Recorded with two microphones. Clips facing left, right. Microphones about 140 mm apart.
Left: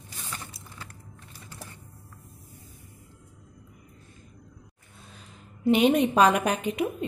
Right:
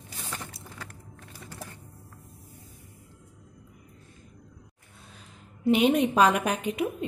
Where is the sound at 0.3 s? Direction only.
60° right (ahead or behind).